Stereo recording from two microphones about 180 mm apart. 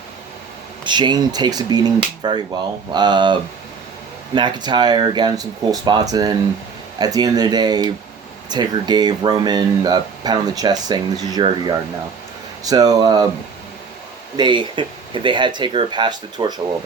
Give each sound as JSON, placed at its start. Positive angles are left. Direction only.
{"t": 0.9, "sound": "speech", "side_deg": -25}
{"t": 12.6, "sound": "speech", "side_deg": -20}
{"t": 14.3, "sound": "speech", "side_deg": -25}